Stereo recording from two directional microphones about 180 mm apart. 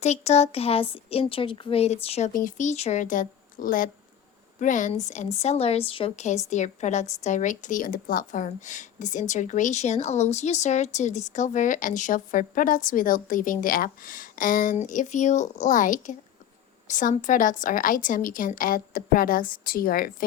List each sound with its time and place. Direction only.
0.0 s a woman's voice: 40° left (ahead or behind)
2.3 s a woman's voice: 45° left (ahead or behind)